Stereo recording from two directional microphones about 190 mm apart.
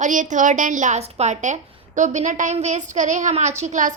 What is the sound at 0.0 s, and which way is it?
A woman's voice, 40° right (ahead or behind).